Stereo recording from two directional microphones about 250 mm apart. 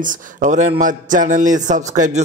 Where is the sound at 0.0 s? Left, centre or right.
Right.